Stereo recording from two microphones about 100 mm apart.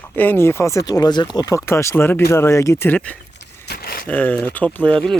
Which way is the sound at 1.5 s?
30° left (ahead or behind).